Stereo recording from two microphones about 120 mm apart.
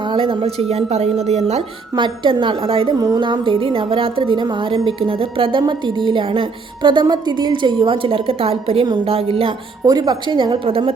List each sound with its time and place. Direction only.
0.0 s a woman's voice: 45° right (ahead or behind); by 1.6 s 65° right (ahead or behind)
2.0 s a woman's voice: 40° right (ahead or behind)
9.8 s speech: 35° right (ahead or behind); by 10.9 s 50° right (ahead or behind)